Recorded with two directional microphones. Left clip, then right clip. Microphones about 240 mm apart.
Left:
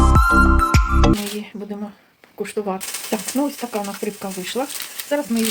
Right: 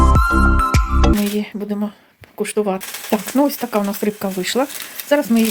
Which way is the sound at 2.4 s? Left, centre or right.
Right.